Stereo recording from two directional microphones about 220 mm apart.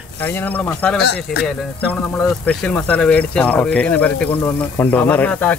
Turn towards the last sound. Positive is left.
turn(degrees=5)  # may be behind; listen again after turning